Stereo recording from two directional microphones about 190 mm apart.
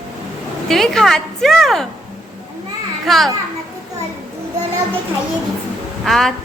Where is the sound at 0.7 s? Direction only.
Centre (ahead or behind).